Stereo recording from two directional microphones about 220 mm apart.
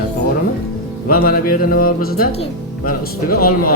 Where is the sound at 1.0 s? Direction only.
45° left (ahead or behind).